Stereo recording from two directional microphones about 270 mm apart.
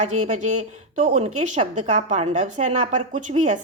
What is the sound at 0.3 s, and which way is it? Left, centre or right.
A woman's voice, right.